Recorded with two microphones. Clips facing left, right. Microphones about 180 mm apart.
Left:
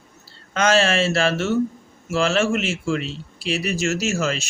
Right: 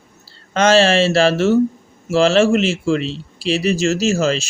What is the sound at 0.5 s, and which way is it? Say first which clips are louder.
Speech: right 5 dB; 30° right (ahead or behind).